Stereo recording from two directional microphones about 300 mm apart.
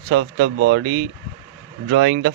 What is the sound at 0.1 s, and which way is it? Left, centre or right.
Speech, right.